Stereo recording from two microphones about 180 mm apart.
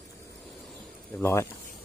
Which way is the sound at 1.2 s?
15° left (ahead or behind).